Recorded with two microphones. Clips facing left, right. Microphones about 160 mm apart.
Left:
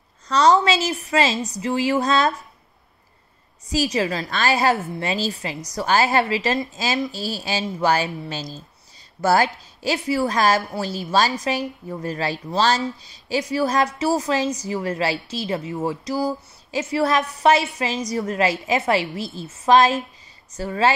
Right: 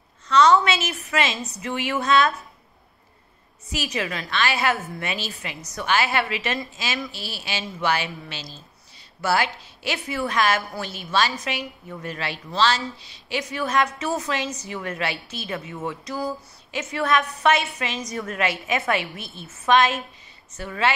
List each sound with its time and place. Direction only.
0.3 s a woman's voice: 35° left (ahead or behind)
3.7 s a woman's voice: 35° left (ahead or behind)